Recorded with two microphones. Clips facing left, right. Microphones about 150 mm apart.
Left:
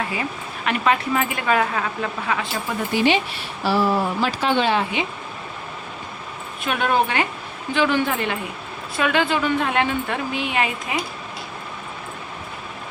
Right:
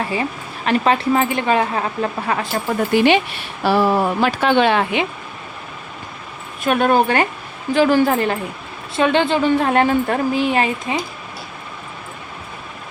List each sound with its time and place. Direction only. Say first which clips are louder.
0.1 s speech: right 4 dB; 30° right (ahead or behind)
2.9 s speech: right 4 dB; 60° right (ahead or behind)
6.7 s speech: right 6 dB; 45° right (ahead or behind)
9.0 s speech: right 5 dB; 30° right (ahead or behind)